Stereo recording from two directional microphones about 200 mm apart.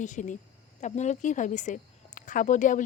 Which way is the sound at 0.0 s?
40° left (ahead or behind).